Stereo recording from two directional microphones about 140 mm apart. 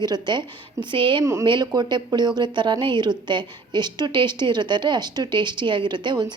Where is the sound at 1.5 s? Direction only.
30° right (ahead or behind).